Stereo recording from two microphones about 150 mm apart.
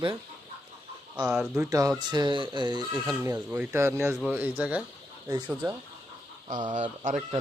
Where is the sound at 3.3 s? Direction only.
10° right (ahead or behind).